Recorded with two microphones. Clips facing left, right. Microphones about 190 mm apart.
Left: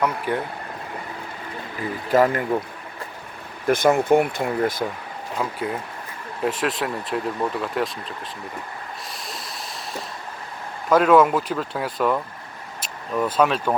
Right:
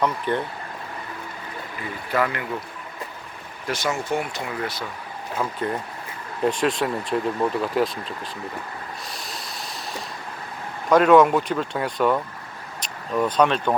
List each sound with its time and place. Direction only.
0.0 s speech: 10° left (ahead or behind)
2.0 s speech: 45° left (ahead or behind)
3.7 s speech: 55° left (ahead or behind)
5.4 s speech: 10° left (ahead or behind)
9.1 s snort: centre (ahead or behind)
10.8 s speech: centre (ahead or behind)